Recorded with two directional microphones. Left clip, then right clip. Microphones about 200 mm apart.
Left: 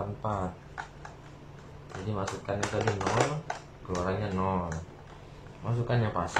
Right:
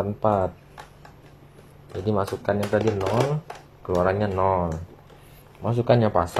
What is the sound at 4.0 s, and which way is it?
Speech, 50° right (ahead or behind).